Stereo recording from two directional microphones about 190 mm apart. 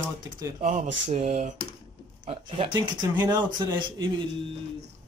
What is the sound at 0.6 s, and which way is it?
Speech, 35° right (ahead or behind).